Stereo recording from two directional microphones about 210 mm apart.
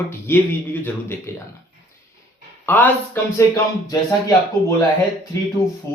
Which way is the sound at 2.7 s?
10° left (ahead or behind).